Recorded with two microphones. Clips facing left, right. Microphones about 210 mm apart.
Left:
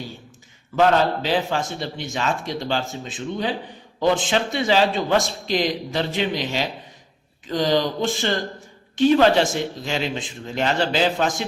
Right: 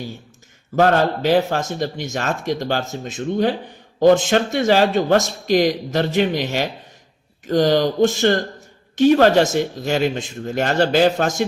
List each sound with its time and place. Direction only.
0.8 s speech: 50° right (ahead or behind)